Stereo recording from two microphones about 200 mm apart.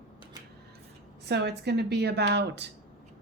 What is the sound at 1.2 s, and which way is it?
A woman's voice, 55° right (ahead or behind).